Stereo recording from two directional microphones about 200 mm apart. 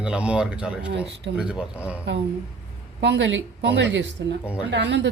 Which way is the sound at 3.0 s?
60° right (ahead or behind).